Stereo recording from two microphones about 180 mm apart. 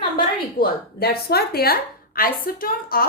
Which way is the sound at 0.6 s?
60° left (ahead or behind).